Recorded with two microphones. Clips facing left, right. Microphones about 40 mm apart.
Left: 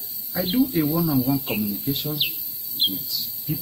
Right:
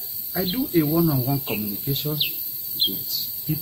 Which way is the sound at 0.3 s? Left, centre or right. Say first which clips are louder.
Left 2 dB; centre.